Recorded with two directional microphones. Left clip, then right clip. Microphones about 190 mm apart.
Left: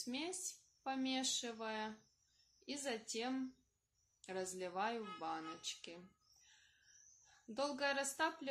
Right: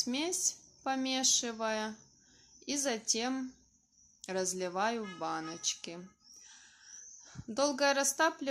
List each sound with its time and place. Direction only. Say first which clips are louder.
0.0 s speech: right 11 dB; 30° right (ahead or behind)
7.4 s speech: right 10 dB; 30° right (ahead or behind)